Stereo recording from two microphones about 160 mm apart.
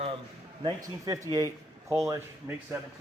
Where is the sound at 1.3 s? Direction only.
20° right (ahead or behind).